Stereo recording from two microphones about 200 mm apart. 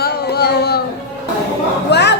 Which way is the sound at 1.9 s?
60° left (ahead or behind).